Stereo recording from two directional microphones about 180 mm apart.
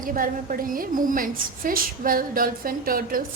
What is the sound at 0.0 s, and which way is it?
A woman's voice, 50° right (ahead or behind).